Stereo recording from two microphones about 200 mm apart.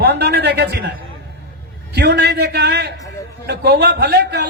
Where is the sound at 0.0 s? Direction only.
55° right (ahead or behind).